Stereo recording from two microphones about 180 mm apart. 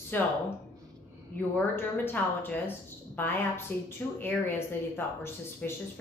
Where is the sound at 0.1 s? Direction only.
10° left (ahead or behind).